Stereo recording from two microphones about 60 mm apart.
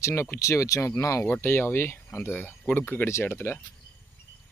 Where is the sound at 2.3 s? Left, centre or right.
Left.